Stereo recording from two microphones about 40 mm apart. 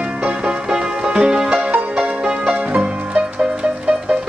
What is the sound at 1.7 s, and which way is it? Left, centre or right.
Music, right.